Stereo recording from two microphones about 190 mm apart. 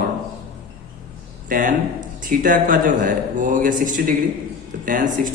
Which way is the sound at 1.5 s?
45° right (ahead or behind).